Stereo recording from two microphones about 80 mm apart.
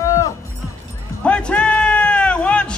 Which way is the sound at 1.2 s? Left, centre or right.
Centre.